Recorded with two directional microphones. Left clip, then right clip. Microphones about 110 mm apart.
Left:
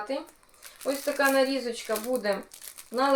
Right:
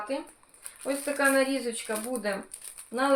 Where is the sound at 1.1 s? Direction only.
30° left (ahead or behind).